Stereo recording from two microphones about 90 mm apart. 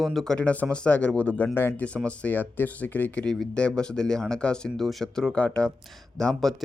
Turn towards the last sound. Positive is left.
turn(degrees=5)  # may be behind; listen again after turning